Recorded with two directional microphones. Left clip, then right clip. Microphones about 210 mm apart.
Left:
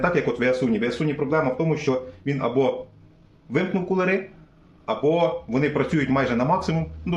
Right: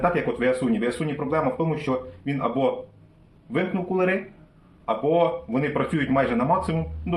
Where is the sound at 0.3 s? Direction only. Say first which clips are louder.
Left 1 dB; 30° left (ahead or behind).